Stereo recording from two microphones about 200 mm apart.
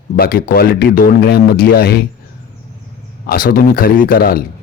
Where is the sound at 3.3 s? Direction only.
45° left (ahead or behind).